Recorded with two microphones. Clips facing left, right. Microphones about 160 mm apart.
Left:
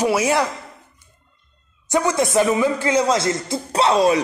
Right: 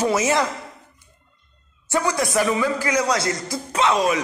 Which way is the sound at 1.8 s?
20° left (ahead or behind).